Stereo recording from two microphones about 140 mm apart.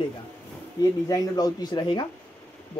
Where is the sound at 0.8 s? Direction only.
25° left (ahead or behind).